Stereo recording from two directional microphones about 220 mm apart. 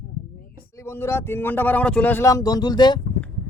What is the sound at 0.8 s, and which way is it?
A man's voice, 10° left (ahead or behind).